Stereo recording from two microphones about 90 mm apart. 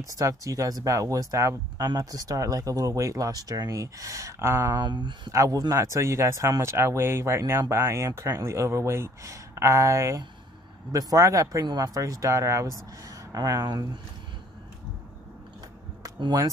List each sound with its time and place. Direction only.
0.0 s speech: 40° right (ahead or behind)
4.7 s speech: 55° right (ahead or behind)
5.3 s speech: 40° right (ahead or behind)